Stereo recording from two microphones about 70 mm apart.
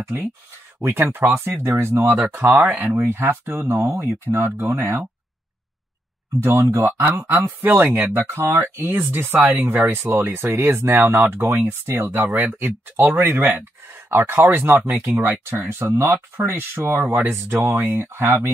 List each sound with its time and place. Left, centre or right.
0.7 s speech: right
2.1 s speech: right
6.4 s speech: right